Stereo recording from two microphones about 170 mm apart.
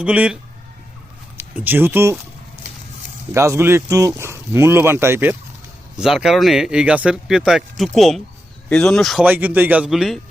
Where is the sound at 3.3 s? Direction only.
15° right (ahead or behind).